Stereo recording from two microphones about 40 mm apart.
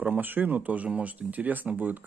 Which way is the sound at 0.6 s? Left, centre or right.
Right.